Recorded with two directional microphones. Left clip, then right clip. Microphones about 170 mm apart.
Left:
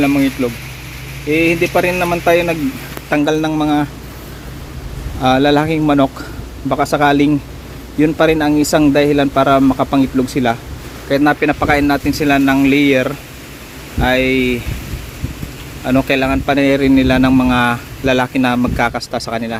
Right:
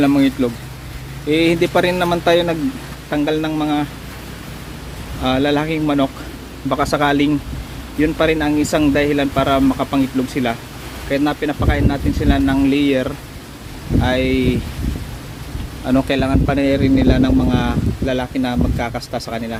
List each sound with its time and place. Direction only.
0.0 s speech: 5° right (ahead or behind)
3.1 s speech: 25° left (ahead or behind)
5.2 s speech: 30° left (ahead or behind)
6.7 s speech: 15° left (ahead or behind)
12.5 s a man's voice: 10° left (ahead or behind)
15.9 s a man's voice: centre (ahead or behind); by 19.5 s 15° left (ahead or behind)